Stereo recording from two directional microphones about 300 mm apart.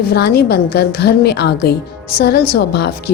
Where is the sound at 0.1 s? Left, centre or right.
Left.